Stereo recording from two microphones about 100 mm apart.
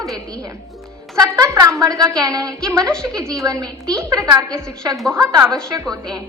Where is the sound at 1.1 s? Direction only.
35° right (ahead or behind).